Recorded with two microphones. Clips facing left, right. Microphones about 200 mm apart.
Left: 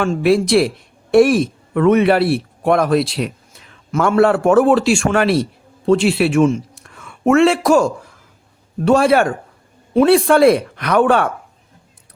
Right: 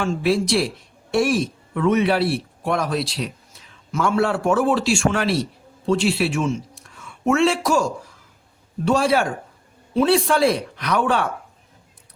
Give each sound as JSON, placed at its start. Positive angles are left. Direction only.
{"t": 0.0, "sound": "speech", "side_deg": 60}